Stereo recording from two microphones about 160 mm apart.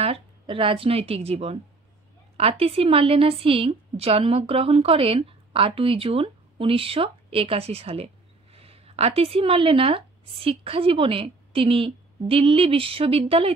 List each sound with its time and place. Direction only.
0.0 s a woman's voice: 35° right (ahead or behind)